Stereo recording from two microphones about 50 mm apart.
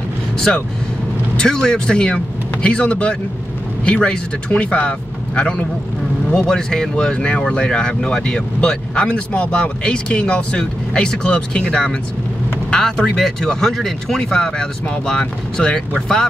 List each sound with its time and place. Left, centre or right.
1.3 s speech: centre